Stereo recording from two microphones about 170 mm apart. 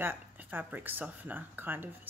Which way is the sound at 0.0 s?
10° right (ahead or behind).